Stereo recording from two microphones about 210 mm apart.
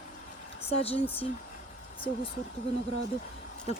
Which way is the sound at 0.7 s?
30° left (ahead or behind).